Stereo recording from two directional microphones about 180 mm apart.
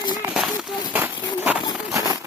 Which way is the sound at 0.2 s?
15° right (ahead or behind).